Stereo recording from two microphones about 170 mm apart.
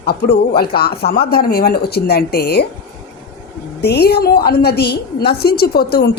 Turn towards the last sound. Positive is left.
turn(degrees=65)  # may be behind; listen again after turning